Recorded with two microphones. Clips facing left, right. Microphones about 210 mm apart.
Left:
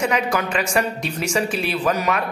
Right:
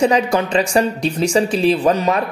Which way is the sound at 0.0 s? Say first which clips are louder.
Right 6 dB; 30° right (ahead or behind).